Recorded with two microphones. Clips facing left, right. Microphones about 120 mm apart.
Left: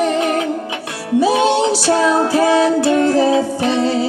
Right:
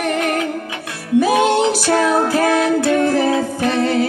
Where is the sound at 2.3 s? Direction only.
20° left (ahead or behind).